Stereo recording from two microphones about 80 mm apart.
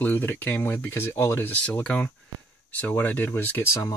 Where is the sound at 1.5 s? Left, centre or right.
Centre.